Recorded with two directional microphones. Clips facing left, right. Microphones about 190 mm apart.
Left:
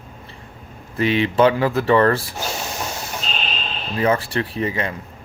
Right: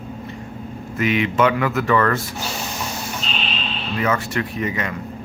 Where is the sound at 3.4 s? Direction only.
45° left (ahead or behind).